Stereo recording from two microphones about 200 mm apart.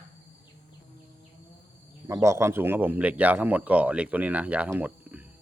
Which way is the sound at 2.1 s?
15° right (ahead or behind).